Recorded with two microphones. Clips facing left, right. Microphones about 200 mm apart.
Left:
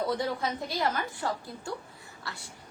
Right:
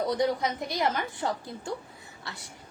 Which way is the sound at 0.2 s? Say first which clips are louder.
Right 4 dB; 20° right (ahead or behind).